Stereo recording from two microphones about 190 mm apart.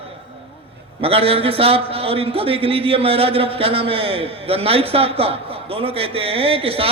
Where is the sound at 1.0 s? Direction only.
30° right (ahead or behind).